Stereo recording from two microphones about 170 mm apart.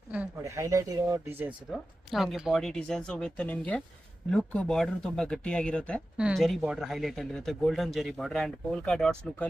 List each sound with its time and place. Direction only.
0.4 s speech: 20° right (ahead or behind)
1.7 s speech: centre (ahead or behind)